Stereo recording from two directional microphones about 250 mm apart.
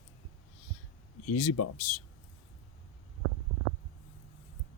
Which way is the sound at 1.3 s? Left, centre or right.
Left.